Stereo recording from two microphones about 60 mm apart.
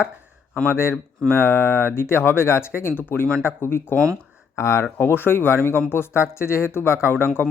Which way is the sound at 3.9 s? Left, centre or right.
Right.